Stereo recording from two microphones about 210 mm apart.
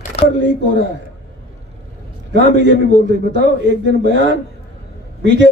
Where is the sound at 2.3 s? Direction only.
55° right (ahead or behind).